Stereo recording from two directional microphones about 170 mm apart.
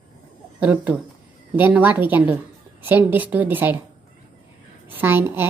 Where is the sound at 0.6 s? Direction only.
10° right (ahead or behind).